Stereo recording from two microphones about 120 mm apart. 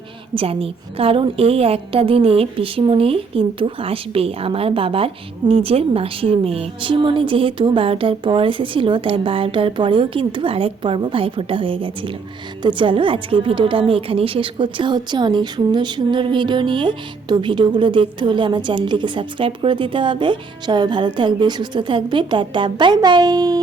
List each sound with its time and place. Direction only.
0.3 s a woman's voice: 50° right (ahead or behind); by 23.6 s 35° right (ahead or behind)